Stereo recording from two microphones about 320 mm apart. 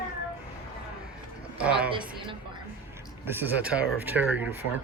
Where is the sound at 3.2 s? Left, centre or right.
Centre.